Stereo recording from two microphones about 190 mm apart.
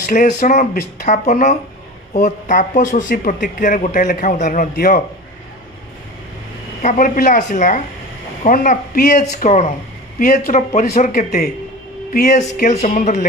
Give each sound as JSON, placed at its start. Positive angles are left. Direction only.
{"t": 0.0, "sound": "speech", "side_deg": 40}
{"t": 6.8, "sound": "speech", "side_deg": 45}